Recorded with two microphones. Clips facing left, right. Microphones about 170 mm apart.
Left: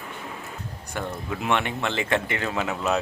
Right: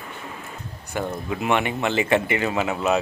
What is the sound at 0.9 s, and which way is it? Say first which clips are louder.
Speech: right 4 dB; 5° right (ahead or behind).